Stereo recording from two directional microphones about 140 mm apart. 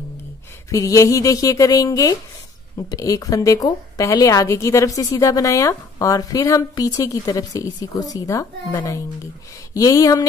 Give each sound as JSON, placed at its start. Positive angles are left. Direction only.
{"t": 0.7, "sound": "a woman's voice", "side_deg": 25}